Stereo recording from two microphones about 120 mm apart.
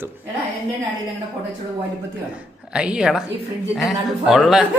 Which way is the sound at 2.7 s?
5° right (ahead or behind).